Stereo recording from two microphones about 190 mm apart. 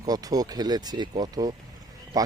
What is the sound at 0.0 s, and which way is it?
Speech, 20° right (ahead or behind).